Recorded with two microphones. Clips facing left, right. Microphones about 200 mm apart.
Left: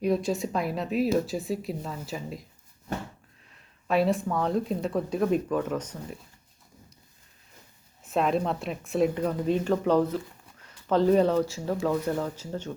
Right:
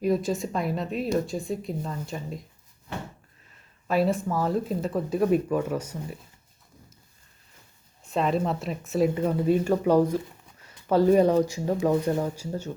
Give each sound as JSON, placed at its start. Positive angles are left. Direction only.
{"t": 0.0, "sound": "speech", "side_deg": 0}
{"t": 2.9, "sound": "a sound", "side_deg": 45}
{"t": 3.8, "sound": "speech", "side_deg": 0}
{"t": 8.0, "sound": "speech", "side_deg": 0}